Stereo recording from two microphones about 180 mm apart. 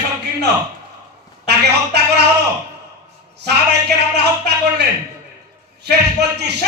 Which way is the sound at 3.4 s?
65° right (ahead or behind).